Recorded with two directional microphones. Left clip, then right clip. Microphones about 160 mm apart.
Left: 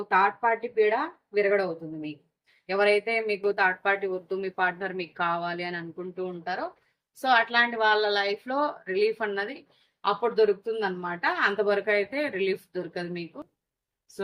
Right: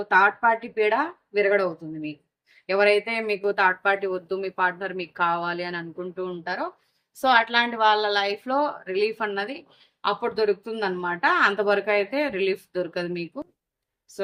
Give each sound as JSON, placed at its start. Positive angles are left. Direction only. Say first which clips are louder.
{"t": 0.4, "sound": "speech", "louder": "right 2 dB", "side_deg": -45}